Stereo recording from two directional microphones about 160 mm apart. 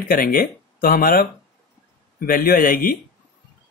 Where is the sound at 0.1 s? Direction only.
65° left (ahead or behind).